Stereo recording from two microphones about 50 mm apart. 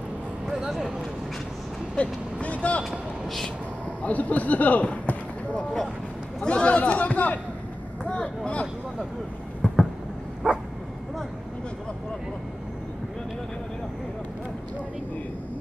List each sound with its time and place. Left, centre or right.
0.5 s speech: centre
2.0 s speech: left
2.8 s speech: centre
4.0 s speech: left
9.6 s a sound: left
10.4 s bow-wow: centre